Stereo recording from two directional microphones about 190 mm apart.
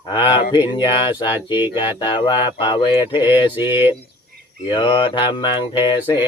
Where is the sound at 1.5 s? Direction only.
10° right (ahead or behind).